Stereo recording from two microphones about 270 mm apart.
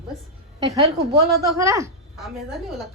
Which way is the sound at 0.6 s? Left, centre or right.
Centre.